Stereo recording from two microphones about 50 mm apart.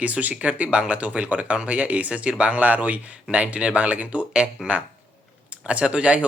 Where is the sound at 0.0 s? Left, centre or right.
Right.